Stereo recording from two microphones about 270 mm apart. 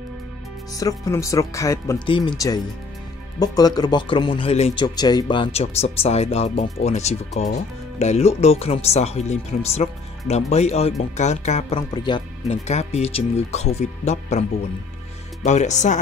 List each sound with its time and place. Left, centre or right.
0.7 s speech: centre
15.4 s speech: left